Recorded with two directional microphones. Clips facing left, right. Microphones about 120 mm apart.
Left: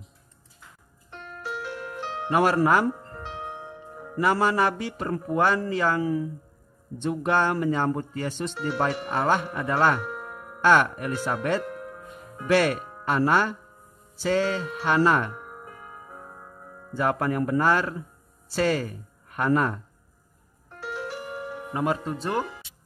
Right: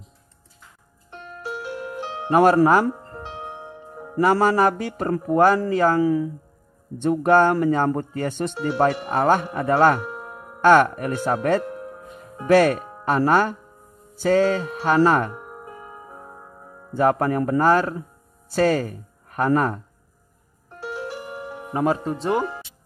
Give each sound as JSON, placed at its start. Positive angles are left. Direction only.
{"t": 1.1, "sound": "music", "side_deg": -15}
{"t": 2.2, "sound": "speech", "side_deg": -40}
{"t": 3.1, "sound": "music", "side_deg": -20}
{"t": 4.2, "sound": "speech", "side_deg": -40}
{"t": 7.0, "sound": "speech", "side_deg": -50}
{"t": 10.0, "sound": "music", "side_deg": -25}
{"t": 10.6, "sound": "speech", "side_deg": -50}
{"t": 11.6, "sound": "music", "side_deg": -25}
{"t": 12.4, "sound": "speech", "side_deg": -40}
{"t": 15.3, "sound": "music", "side_deg": -20}
{"t": 16.9, "sound": "speech", "side_deg": -40}
{"t": 20.8, "sound": "music", "side_deg": -20}
{"t": 21.8, "sound": "speech", "side_deg": -30}